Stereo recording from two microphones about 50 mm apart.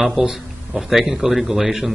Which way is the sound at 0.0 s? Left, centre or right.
Centre.